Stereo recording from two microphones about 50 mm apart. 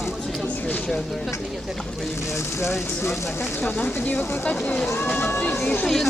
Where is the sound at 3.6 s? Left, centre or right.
Left.